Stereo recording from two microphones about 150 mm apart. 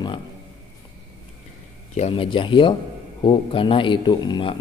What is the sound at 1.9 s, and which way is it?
Mantra, 40° left (ahead or behind).